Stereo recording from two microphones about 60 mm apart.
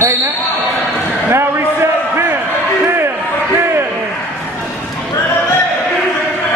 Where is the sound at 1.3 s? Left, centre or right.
Right.